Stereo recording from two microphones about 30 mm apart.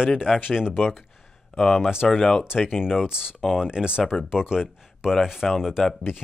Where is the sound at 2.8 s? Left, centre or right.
Centre.